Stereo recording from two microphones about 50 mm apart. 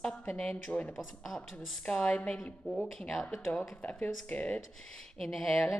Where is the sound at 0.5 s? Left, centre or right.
Left.